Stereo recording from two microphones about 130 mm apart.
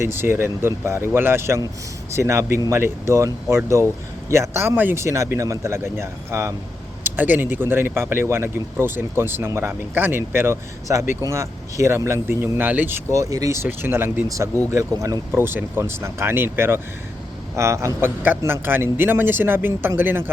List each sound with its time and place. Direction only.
0.0 s speech: 20° right (ahead or behind)